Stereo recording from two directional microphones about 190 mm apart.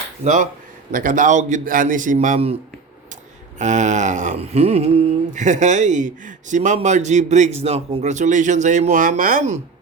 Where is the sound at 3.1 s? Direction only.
40° right (ahead or behind).